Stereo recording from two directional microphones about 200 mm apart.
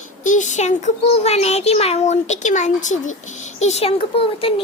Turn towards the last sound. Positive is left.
turn(degrees=25)  # may be behind; listen again after turning